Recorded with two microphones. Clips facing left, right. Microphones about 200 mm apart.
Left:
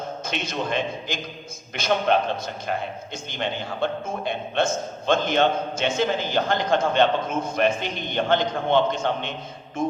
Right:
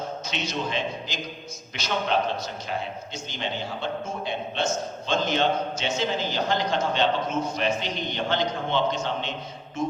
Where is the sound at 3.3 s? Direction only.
55° left (ahead or behind).